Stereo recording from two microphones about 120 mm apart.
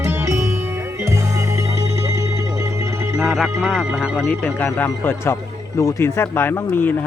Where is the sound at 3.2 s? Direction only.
Centre (ahead or behind); by 6.9 s 15° left (ahead or behind).